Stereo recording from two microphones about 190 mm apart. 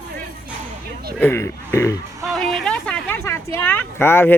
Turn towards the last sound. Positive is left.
turn(degrees=10)  # may be behind; listen again after turning